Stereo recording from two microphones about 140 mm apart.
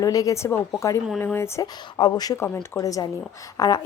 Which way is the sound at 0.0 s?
25° left (ahead or behind).